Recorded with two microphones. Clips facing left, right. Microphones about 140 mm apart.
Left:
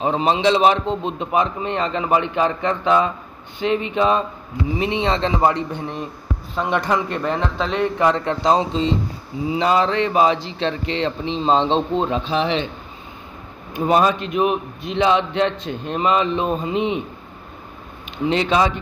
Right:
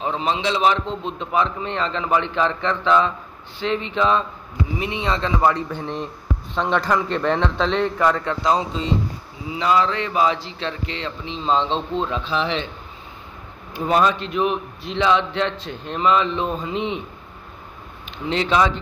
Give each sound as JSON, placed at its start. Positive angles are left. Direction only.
{"t": 0.0, "sound": "a man's voice", "side_deg": 20}
{"t": 4.7, "sound": "a man's voice", "side_deg": 30}
{"t": 13.7, "sound": "a man's voice", "side_deg": 15}
{"t": 18.2, "sound": "a man's voice", "side_deg": 15}